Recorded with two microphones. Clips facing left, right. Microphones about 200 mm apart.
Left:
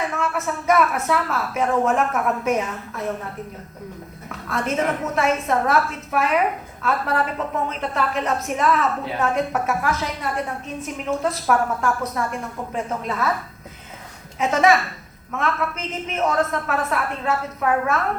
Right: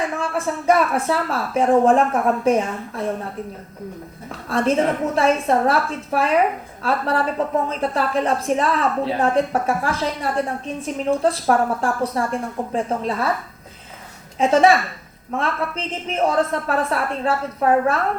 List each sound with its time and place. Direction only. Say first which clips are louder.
0.2 s a woman's voice: right 1 dB; 30° right (ahead or behind)
4.3 s a woman's voice: right 5 dB; 30° right (ahead or behind)
14.3 s a woman's voice: right 3 dB; 30° right (ahead or behind)